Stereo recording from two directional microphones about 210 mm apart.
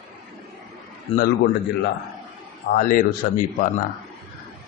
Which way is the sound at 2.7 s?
40° left (ahead or behind).